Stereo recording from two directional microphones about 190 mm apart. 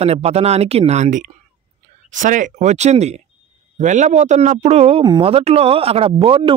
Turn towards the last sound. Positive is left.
turn(degrees=-30)  # may be behind; listen again after turning